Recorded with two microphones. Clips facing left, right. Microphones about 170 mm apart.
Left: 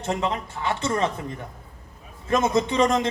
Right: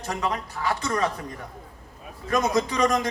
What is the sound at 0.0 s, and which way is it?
A man's voice, 25° left (ahead or behind).